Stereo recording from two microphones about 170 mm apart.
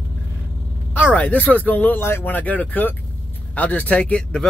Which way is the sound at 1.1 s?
10° left (ahead or behind).